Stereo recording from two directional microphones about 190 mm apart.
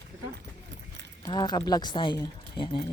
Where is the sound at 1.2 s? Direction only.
25° left (ahead or behind).